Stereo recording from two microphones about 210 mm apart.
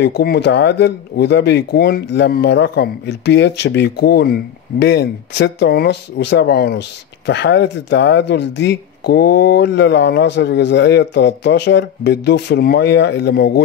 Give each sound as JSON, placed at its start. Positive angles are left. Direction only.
{"t": 0.0, "sound": "speech", "side_deg": 50}